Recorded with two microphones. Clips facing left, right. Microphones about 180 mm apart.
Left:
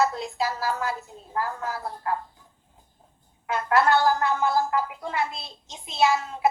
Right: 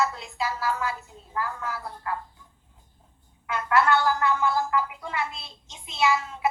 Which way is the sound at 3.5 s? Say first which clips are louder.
Left 2 dB; 35° left (ahead or behind).